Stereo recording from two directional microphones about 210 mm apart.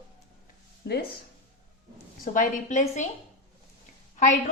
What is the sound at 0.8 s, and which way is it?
Speech, 50° left (ahead or behind).